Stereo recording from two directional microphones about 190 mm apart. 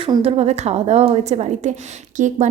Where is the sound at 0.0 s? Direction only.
30° right (ahead or behind).